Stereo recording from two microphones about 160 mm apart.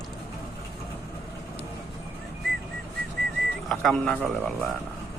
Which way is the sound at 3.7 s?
5° left (ahead or behind).